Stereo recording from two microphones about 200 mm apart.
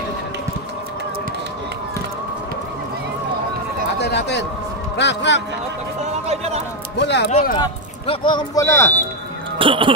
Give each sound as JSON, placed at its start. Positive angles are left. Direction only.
{"t": 4.0, "sound": "a man's voice", "side_deg": 60}
{"t": 6.2, "sound": "speech", "side_deg": -30}
{"t": 7.0, "sound": "a man's voice", "side_deg": 60}
{"t": 7.5, "sound": "speech", "side_deg": 25}
{"t": 9.6, "sound": "speech", "side_deg": -25}